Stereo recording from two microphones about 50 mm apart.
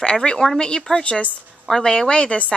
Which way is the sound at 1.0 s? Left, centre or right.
Left.